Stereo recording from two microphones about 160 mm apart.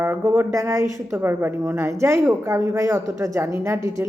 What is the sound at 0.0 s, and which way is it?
A woman's voice, 15° right (ahead or behind).